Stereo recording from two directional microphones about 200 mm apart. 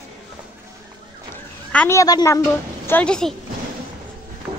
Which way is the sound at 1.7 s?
10° left (ahead or behind).